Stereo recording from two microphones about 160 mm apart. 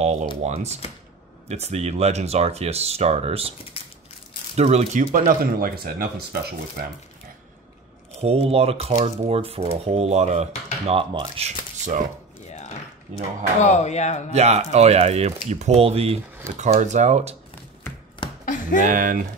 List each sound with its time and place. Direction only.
0.0 s speech: 45° right (ahead or behind)
3.8 s crushing: 35° left (ahead or behind)
4.6 s speech: 45° right (ahead or behind)
5.1 s speech: 60° right (ahead or behind)
8.2 s speech: 40° right (ahead or behind)
12.4 s a sound: 45° left (ahead or behind)
13.7 s speech: 45° left (ahead or behind)
14.3 s speech: 40° right (ahead or behind)
18.4 s a sound: 55° left (ahead or behind)
18.8 s speech: 55° right (ahead or behind)